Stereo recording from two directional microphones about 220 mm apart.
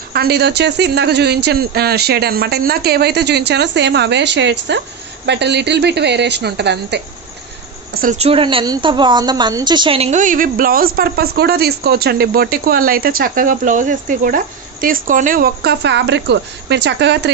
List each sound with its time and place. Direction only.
0.1 s speech: 45° right (ahead or behind)
7.9 s a woman's voice: 35° right (ahead or behind)